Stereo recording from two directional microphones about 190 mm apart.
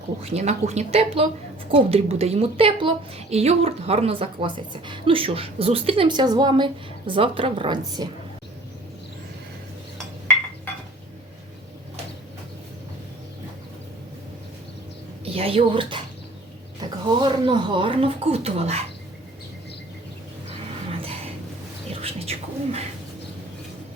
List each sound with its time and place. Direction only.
0.2 s a woman's voice: 35° right (ahead or behind)
15.2 s speech: 30° right (ahead or behind)
17.2 s a woman's voice: 25° right (ahead or behind)
22.0 s bird: 30° right (ahead or behind)